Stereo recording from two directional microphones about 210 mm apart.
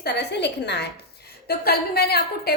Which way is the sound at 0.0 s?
50° left (ahead or behind).